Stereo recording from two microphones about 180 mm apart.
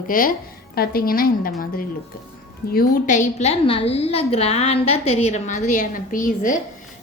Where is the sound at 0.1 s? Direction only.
50° left (ahead or behind).